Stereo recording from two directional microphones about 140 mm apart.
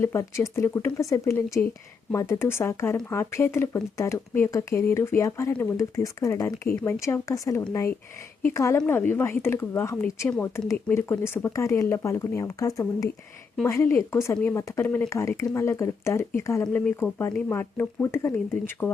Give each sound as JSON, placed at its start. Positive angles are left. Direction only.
{"t": 0.0, "sound": "a woman's voice", "side_deg": 20}